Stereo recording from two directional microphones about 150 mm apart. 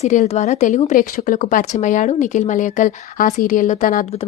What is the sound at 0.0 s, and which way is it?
Speech, 50° left (ahead or behind).